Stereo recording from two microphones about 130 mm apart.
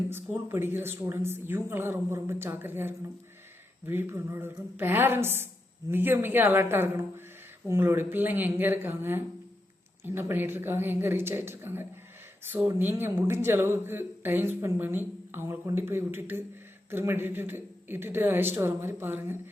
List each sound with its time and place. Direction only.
0.1 s speech: 15° right (ahead or behind)